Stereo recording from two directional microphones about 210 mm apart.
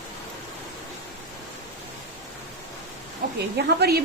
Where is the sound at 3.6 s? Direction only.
50° right (ahead or behind).